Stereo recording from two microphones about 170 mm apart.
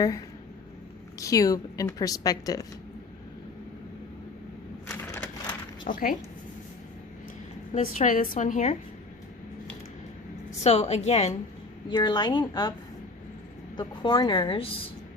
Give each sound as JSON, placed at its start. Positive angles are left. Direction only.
{"t": 1.2, "sound": "a woman's voice", "side_deg": 20}
{"t": 4.9, "sound": "crushing", "side_deg": 10}
{"t": 5.9, "sound": "a woman's voice", "side_deg": 50}
{"t": 7.7, "sound": "a woman's voice", "side_deg": 45}
{"t": 10.6, "sound": "a woman's voice", "side_deg": 40}
{"t": 11.9, "sound": "a woman's voice", "side_deg": 25}
{"t": 13.7, "sound": "a woman's voice", "side_deg": 25}